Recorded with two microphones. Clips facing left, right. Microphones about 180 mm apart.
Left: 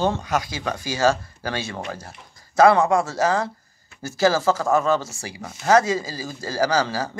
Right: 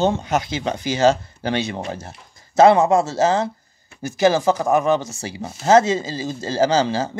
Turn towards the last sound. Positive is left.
turn(degrees=-25)  # may be behind; listen again after turning